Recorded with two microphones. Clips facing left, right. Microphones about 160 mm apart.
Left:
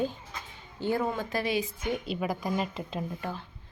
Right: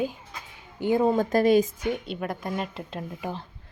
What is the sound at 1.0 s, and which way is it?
Speech, 40° right (ahead or behind).